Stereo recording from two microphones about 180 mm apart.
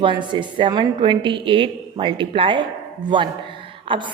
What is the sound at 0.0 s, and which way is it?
A woman's voice, 25° right (ahead or behind).